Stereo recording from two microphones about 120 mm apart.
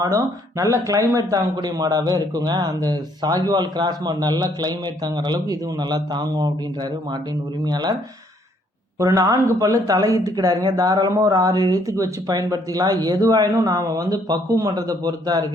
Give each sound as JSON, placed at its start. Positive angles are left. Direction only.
{"t": 0.6, "sound": "a man's voice", "side_deg": -25}
{"t": 7.7, "sound": "a man's voice", "side_deg": -35}
{"t": 9.0, "sound": "a man's voice", "side_deg": -30}